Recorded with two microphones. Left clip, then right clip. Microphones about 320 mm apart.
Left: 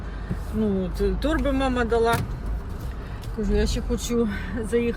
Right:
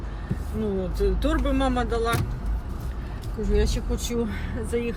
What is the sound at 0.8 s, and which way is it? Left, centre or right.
Speech, centre.